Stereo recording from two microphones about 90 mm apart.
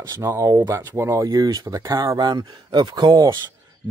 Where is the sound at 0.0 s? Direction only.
35° right (ahead or behind).